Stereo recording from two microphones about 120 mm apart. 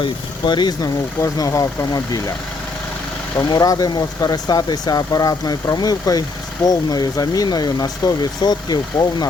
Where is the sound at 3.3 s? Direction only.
30° left (ahead or behind).